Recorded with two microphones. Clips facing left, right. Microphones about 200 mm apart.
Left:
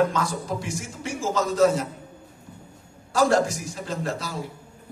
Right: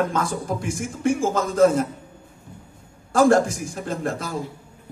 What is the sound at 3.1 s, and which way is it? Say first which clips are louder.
A man's voice: right 4 dB; 50° right (ahead or behind).